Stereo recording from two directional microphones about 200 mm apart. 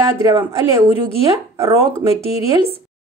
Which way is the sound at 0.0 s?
20° right (ahead or behind).